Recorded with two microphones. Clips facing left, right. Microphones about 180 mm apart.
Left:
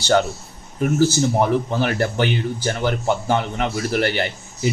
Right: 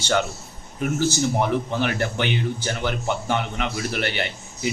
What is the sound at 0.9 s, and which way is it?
A man's voice, 35° left (ahead or behind).